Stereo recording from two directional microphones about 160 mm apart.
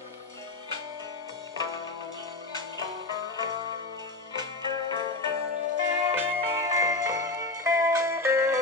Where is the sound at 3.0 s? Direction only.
25° right (ahead or behind).